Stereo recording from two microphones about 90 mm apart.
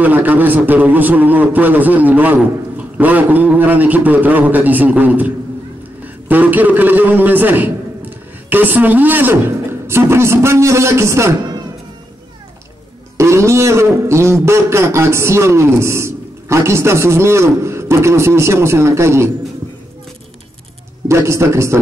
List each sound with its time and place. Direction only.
0.0 s a man's voice: 20° right (ahead or behind)
13.2 s a man's voice: 30° right (ahead or behind)
21.1 s a man's voice: 30° right (ahead or behind)